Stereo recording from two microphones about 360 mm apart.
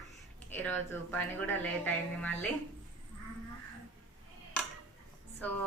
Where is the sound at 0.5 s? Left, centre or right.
Centre.